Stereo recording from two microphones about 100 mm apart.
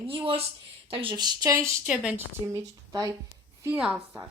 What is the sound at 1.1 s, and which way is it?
Speech, 40° right (ahead or behind).